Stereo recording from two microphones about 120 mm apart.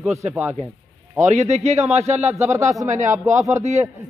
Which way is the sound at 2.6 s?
25° right (ahead or behind).